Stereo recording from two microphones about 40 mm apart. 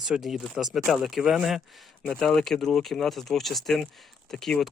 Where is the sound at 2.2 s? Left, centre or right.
Centre.